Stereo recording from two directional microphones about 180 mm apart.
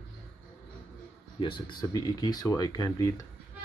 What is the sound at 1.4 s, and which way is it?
Speech, 25° left (ahead or behind).